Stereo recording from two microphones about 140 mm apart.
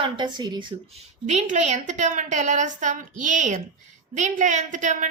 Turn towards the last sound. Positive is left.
turn(degrees=-65)  # may be behind; listen again after turning